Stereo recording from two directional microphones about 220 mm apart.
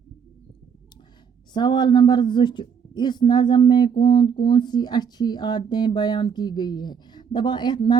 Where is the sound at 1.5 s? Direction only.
20° left (ahead or behind).